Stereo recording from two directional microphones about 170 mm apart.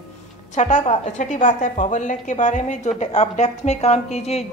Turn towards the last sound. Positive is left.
turn(degrees=40)  # may be behind; listen again after turning